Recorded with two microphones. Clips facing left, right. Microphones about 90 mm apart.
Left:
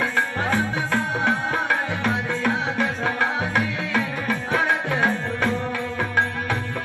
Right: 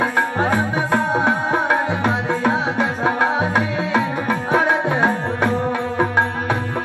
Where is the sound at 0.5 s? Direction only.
20° right (ahead or behind).